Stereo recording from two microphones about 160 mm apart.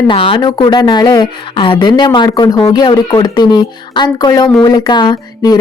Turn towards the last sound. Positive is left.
turn(degrees=25)  # may be behind; listen again after turning